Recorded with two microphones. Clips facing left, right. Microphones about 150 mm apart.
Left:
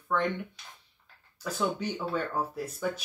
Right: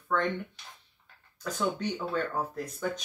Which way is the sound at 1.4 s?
10° left (ahead or behind).